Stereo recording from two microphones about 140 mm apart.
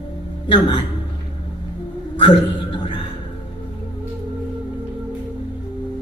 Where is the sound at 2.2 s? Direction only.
35° left (ahead or behind).